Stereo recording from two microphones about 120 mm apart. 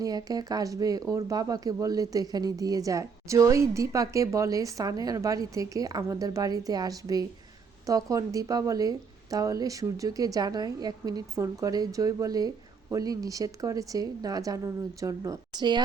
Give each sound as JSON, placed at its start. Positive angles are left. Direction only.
{"t": 0.0, "sound": "a woman's voice", "side_deg": -30}